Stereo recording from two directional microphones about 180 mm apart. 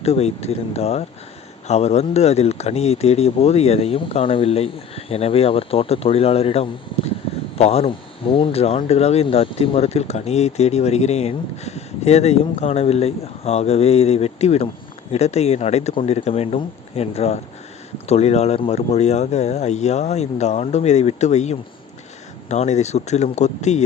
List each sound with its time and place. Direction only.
0.0 s speech: 35° left (ahead or behind)